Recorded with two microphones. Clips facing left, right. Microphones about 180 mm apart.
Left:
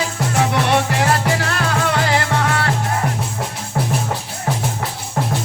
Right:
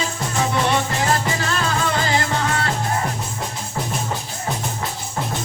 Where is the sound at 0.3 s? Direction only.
65° left (ahead or behind).